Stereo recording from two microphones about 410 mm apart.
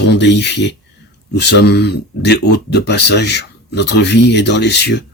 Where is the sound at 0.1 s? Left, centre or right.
Left.